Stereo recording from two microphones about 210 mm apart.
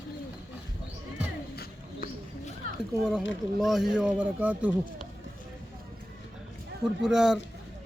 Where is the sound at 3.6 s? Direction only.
Centre (ahead or behind).